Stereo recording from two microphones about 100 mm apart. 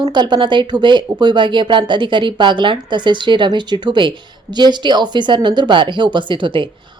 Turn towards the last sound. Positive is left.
turn(degrees=-55)  # may be behind; listen again after turning